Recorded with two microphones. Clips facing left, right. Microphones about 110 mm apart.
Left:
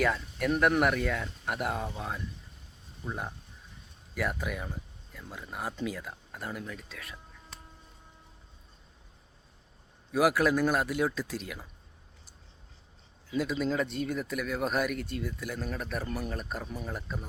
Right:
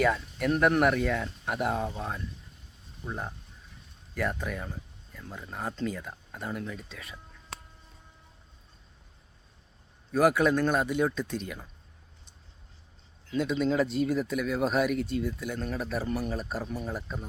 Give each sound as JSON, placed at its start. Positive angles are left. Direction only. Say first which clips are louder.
{"t": 0.0, "sound": "speech", "louder": "right 2 dB", "side_deg": 0}
{"t": 7.5, "sound": "a sound", "louder": "right 8 dB", "side_deg": -70}
{"t": 10.1, "sound": "speech", "louder": "right 2 dB", "side_deg": 5}
{"t": 13.2, "sound": "speech", "louder": "right 3 dB", "side_deg": 5}